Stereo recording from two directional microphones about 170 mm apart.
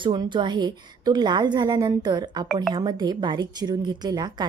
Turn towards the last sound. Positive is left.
turn(degrees=-25)  # may be behind; listen again after turning